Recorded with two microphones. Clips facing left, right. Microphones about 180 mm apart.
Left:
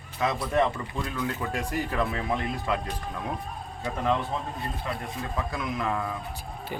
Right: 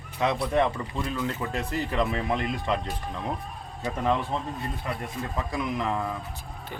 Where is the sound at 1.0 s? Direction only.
25° right (ahead or behind).